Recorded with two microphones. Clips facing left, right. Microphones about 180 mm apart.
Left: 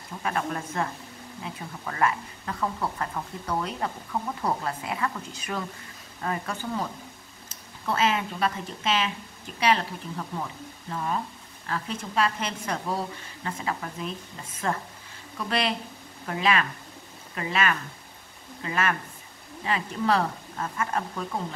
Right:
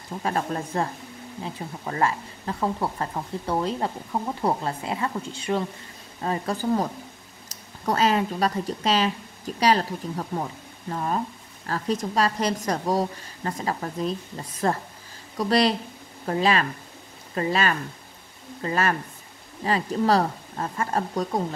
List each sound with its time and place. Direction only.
0.2 s speech: 30° right (ahead or behind)